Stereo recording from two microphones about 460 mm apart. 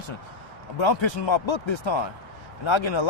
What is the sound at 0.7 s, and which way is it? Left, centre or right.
Speech, left.